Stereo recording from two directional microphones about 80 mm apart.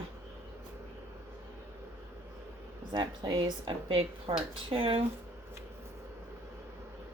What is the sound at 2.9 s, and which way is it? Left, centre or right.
A woman's voice, right.